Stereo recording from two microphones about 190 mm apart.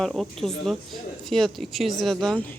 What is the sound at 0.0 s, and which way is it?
Speech, centre (ahead or behind).